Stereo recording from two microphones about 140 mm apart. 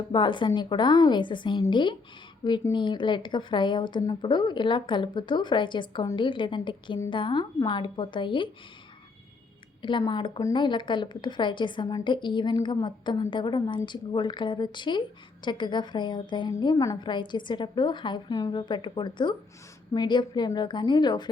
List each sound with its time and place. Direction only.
0.1 s a woman's voice: 35° left (ahead or behind)
10.0 s a woman's voice: 35° left (ahead or behind)